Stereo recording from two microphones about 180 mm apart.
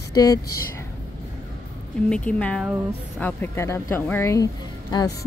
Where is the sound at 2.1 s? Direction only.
5° left (ahead or behind).